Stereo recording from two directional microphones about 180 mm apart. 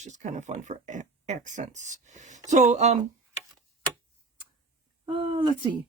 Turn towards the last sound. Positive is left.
turn(degrees=-25)  # may be behind; listen again after turning